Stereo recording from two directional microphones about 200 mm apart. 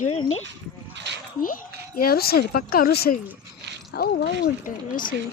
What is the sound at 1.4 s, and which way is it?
Speech, 45° left (ahead or behind).